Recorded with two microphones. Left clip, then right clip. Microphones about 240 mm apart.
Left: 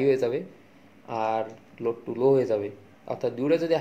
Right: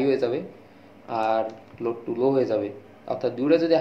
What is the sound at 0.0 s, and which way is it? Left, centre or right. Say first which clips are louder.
Speech: even; left.